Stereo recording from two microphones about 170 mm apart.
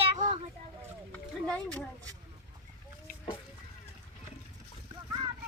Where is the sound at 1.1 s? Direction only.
5° left (ahead or behind).